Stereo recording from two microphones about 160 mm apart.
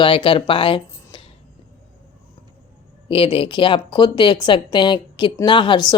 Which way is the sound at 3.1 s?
35° left (ahead or behind).